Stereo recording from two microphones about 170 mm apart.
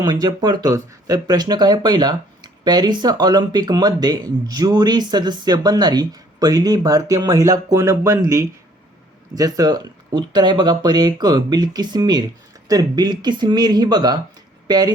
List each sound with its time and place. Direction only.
0.0 s speech: 25° right (ahead or behind)